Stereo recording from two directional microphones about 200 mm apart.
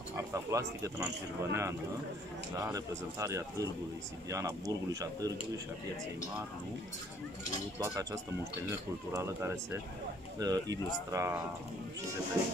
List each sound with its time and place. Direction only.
0.3 s speech: 15° right (ahead or behind)
7.8 s speech: 15° right (ahead or behind)